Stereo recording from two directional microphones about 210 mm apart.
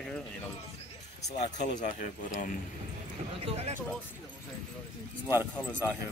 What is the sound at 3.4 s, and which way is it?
Speech, 30° right (ahead or behind).